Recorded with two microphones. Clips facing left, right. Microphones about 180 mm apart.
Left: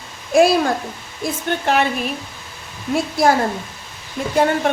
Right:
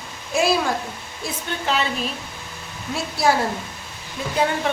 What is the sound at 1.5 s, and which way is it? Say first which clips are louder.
Speech: left 6 dB; 55° left (ahead or behind).